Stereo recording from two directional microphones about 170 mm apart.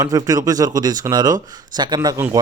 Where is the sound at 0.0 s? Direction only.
20° right (ahead or behind).